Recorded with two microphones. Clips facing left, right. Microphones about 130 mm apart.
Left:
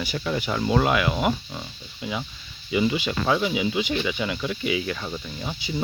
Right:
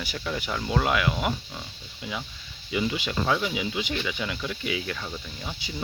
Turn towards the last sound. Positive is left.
turn(degrees=10)  # may be behind; listen again after turning